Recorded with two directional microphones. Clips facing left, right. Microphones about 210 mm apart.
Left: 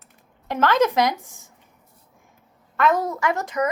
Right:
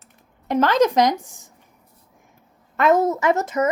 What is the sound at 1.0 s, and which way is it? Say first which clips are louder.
Speech: right 4 dB; 15° right (ahead or behind).